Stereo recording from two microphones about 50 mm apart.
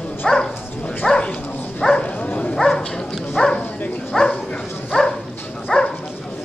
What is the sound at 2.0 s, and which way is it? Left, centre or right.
Dog, left.